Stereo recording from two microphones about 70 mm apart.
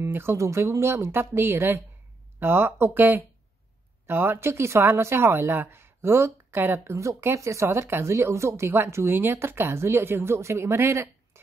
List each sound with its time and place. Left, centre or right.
0.0 s speech: right